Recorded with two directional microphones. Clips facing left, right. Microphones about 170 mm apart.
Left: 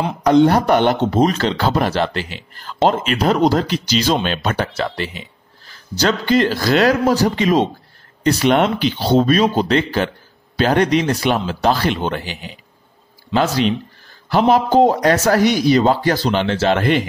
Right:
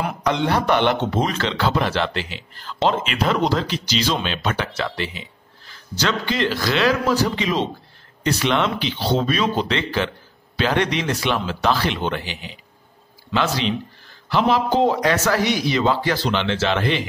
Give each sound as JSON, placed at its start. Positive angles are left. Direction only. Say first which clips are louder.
{"t": 0.2, "sound": "a man's voice", "louder": "left 10 dB", "side_deg": 40}